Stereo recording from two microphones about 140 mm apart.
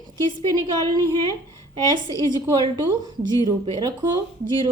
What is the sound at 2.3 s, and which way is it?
A woman's voice, 35° right (ahead or behind).